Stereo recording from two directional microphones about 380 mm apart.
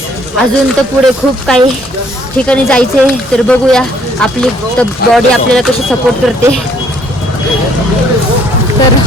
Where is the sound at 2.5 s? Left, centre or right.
Centre.